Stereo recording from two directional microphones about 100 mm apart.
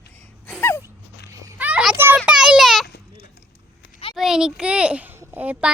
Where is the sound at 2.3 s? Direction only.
5° right (ahead or behind).